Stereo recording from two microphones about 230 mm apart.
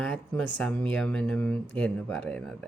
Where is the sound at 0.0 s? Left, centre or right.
Centre.